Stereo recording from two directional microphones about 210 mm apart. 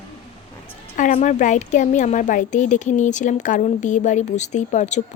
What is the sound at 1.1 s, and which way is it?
Speech, 35° left (ahead or behind).